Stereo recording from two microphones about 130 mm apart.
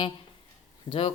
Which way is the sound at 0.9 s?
45° left (ahead or behind).